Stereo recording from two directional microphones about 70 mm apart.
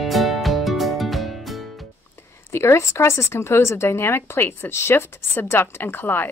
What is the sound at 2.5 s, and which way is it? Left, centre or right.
Speech, left.